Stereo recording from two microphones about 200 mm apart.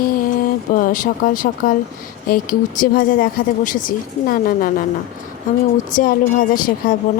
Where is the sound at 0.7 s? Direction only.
40° left (ahead or behind).